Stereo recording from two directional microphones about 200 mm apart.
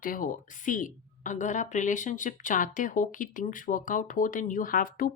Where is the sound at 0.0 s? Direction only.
45° left (ahead or behind).